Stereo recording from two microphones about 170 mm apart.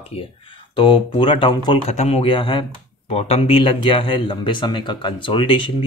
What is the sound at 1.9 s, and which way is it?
Speech, 40° left (ahead or behind).